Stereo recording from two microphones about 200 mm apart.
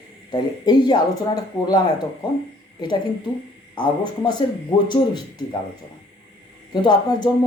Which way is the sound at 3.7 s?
25° left (ahead or behind).